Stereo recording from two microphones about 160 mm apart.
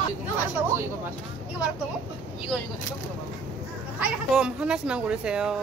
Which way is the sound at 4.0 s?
5° right (ahead or behind).